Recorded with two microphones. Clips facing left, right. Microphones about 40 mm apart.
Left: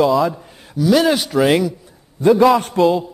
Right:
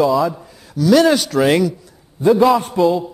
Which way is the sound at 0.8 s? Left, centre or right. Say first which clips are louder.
Right 2 dB; centre.